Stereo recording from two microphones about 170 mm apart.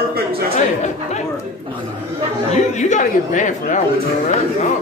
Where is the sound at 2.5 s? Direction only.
45° left (ahead or behind).